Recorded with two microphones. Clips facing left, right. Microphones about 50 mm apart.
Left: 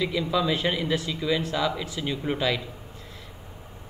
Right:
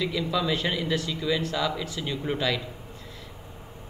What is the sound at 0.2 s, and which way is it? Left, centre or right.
A man's voice, centre.